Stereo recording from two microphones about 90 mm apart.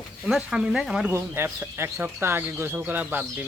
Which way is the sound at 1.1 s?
25° right (ahead or behind).